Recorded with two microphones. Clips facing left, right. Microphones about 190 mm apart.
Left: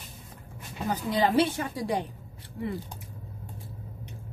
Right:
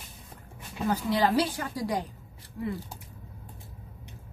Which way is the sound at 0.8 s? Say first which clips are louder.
Right 1 dB; 25° left (ahead or behind).